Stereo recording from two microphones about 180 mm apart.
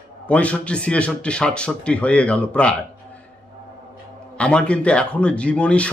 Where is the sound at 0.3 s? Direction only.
5° left (ahead or behind).